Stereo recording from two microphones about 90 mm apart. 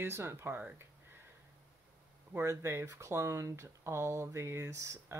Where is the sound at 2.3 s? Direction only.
30° right (ahead or behind).